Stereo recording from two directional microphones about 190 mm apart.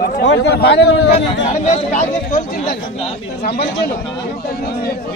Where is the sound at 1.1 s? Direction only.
40° left (ahead or behind).